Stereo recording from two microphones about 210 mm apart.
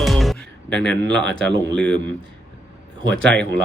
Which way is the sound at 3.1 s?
60° right (ahead or behind).